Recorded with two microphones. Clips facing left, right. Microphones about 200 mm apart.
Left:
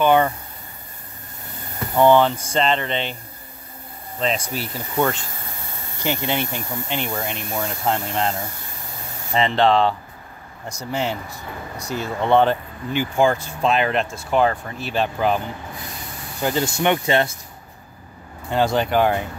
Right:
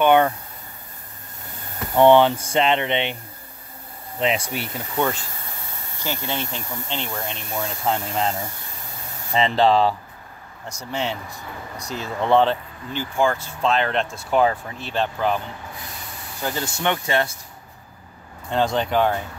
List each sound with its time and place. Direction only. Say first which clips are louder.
0.0 s speech: even; 5° left (ahead or behind)
2.0 s speech: right 1 dB; 20° right (ahead or behind)
2.3 s speech: right 1 dB; 10° right (ahead or behind)
4.7 s speech: left 2 dB; centre (ahead or behind)
6.0 s speech: left 4 dB; 15° left (ahead or behind)
7.6 s speech: even; centre (ahead or behind)
10.7 s speech: left 2 dB; 10° left (ahead or behind)
14.9 s speech: left 2 dB; 10° left (ahead or behind)
18.5 s speech: left 2 dB; 5° left (ahead or behind)